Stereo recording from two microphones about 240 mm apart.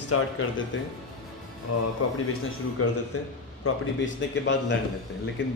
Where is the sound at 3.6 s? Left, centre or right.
Left.